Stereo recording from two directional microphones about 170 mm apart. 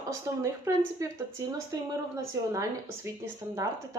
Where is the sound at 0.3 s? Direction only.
20° right (ahead or behind).